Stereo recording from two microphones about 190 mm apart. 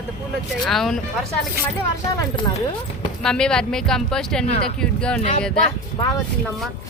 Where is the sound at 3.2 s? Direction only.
5° left (ahead or behind).